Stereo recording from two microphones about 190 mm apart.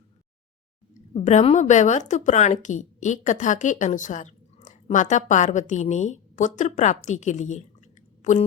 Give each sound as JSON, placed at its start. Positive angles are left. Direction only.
{"t": 1.1, "sound": "a woman's voice", "side_deg": 40}